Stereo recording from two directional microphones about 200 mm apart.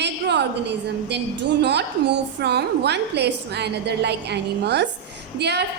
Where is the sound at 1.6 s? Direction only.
55° right (ahead or behind).